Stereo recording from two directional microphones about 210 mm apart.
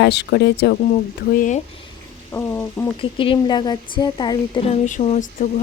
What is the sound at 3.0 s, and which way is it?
Speech, 25° left (ahead or behind).